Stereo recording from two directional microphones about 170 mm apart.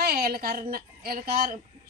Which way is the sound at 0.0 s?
60° right (ahead or behind).